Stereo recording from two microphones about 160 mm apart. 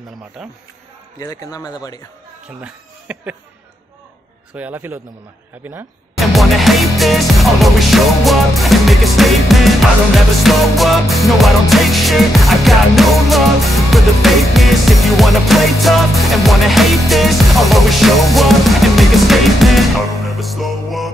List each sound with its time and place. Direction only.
1.2 s a man's voice: 20° left (ahead or behind)
2.6 s speech: 10° right (ahead or behind)
4.6 s a man's voice: 10° right (ahead or behind)
6.1 s music: centre (ahead or behind)